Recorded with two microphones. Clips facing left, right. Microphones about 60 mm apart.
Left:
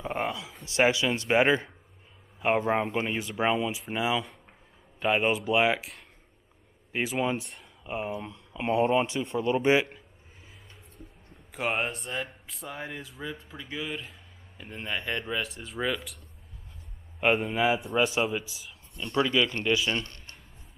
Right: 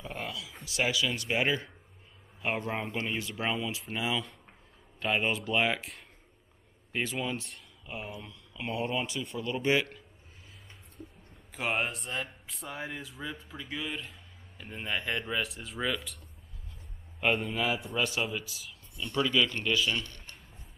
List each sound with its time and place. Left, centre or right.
0.0 s speech: left; by 7.2 s centre
7.8 s speech: left
11.5 s speech: centre
17.2 s speech: centre
19.9 s speech: left